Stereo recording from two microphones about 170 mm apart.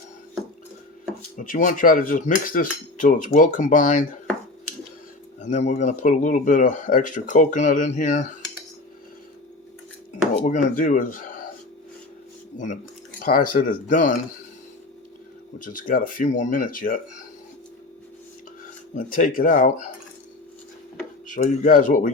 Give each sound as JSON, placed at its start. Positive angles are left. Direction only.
{"t": 1.5, "sound": "speech", "side_deg": 50}
{"t": 5.4, "sound": "speech", "side_deg": 45}
{"t": 10.4, "sound": "speech", "side_deg": 50}
{"t": 12.5, "sound": "speech", "side_deg": 50}
{"t": 15.5, "sound": "speech", "side_deg": 50}
{"t": 18.9, "sound": "speech", "side_deg": 55}
{"t": 21.2, "sound": "speech", "side_deg": 50}